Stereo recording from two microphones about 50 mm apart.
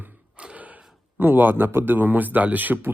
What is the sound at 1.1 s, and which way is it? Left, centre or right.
Speech, right.